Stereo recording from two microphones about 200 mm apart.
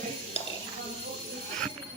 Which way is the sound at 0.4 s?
30° left (ahead or behind).